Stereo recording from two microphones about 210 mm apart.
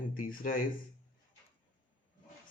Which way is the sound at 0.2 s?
40° left (ahead or behind).